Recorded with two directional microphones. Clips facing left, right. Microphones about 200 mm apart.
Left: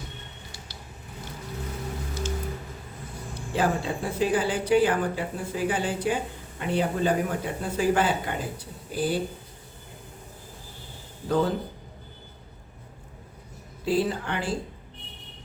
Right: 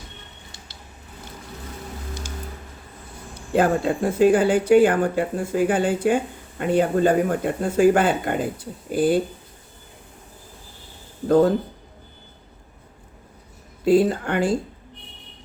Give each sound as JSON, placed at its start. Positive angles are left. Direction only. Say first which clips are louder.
{"t": 3.5, "sound": "speech", "louder": "right 7 dB", "side_deg": -55}
{"t": 11.3, "sound": "speech", "louder": "right 8 dB", "side_deg": -50}
{"t": 13.8, "sound": "speech", "louder": "right 8 dB", "side_deg": -50}